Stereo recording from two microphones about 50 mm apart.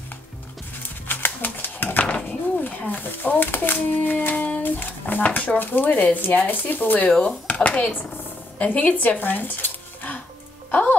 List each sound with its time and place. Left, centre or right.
1.0 s a sound: left
2.0 s dishes: left
2.9 s a child's voice: left
7.1 s speech: left